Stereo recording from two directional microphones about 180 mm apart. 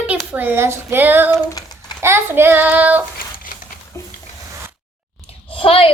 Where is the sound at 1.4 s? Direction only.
20° left (ahead or behind).